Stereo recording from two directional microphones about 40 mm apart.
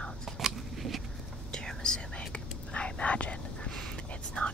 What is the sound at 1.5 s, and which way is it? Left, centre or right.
Whispering, centre.